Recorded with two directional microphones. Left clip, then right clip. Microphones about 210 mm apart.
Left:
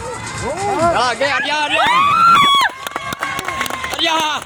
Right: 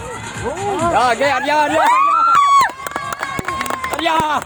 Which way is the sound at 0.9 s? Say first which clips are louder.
Right 2 dB; 50° right (ahead or behind).